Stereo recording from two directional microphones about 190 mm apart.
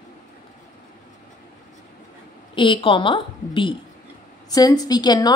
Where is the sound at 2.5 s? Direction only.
25° left (ahead or behind).